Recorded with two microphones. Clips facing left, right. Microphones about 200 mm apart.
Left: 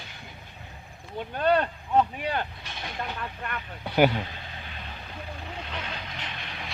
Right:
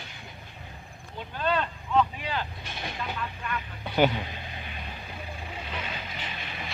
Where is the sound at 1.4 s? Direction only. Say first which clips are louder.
Left 5 dB; 55° left (ahead or behind).